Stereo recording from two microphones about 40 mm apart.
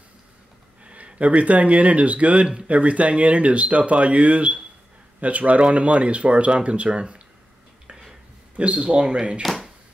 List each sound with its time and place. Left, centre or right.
0.8 s speech: right
8.5 s speech: right
9.4 s speech: centre